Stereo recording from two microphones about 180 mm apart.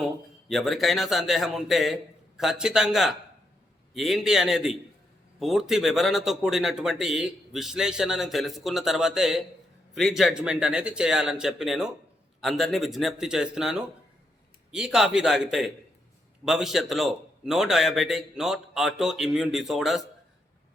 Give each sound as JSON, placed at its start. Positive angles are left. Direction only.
{"t": 0.0, "sound": "speech", "side_deg": 0}